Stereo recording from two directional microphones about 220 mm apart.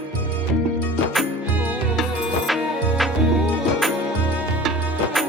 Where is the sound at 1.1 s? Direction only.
5° right (ahead or behind).